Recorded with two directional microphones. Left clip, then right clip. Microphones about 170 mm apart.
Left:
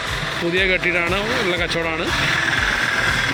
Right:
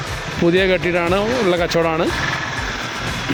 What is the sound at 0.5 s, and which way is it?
Speech, 40° right (ahead or behind).